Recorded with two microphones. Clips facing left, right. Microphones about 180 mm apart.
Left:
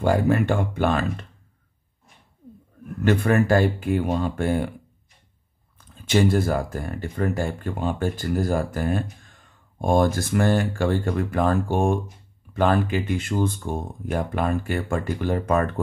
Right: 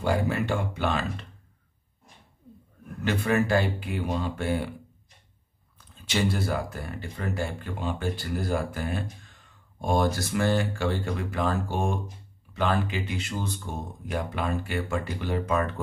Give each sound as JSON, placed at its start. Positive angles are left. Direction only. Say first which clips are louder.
{"t": 0.0, "sound": "speech", "louder": "left 6 dB", "side_deg": 50}
{"t": 3.0, "sound": "speech", "louder": "left 5 dB", "side_deg": 50}
{"t": 6.0, "sound": "speech", "louder": "left 7 dB", "side_deg": 45}